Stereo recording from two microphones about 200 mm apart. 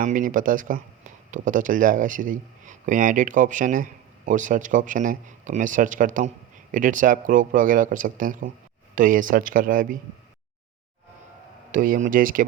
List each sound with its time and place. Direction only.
0.0 s speech: 40° right (ahead or behind)
11.7 s speech: 45° right (ahead or behind)